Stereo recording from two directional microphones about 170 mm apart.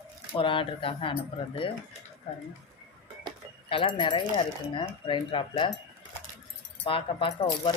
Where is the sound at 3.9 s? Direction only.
30° left (ahead or behind).